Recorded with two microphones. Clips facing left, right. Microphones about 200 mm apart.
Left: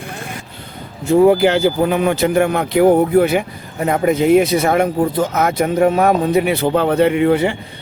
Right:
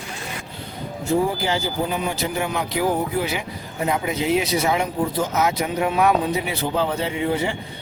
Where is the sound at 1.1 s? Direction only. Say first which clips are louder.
Left 10 dB; 65° left (ahead or behind).